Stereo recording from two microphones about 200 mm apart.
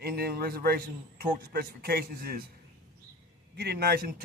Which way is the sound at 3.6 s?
50° right (ahead or behind).